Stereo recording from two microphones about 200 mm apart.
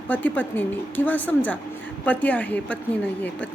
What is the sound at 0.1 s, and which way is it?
Speech, 10° left (ahead or behind).